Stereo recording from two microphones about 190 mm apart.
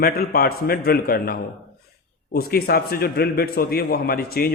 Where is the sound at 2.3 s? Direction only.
55° left (ahead or behind).